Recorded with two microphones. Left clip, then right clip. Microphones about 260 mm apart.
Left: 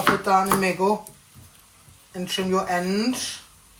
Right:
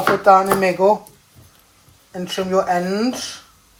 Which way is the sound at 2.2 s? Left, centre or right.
Right.